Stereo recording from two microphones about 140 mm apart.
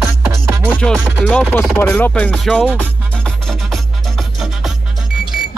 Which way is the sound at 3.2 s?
5° left (ahead or behind).